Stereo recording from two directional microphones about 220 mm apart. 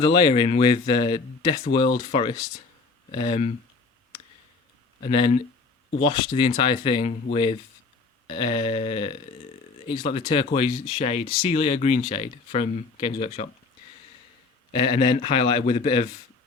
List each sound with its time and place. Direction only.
0.0 s speech: 20° left (ahead or behind)
5.0 s speech: 25° left (ahead or behind)
8.3 s speech: 20° left (ahead or behind)
14.7 s speech: 25° left (ahead or behind)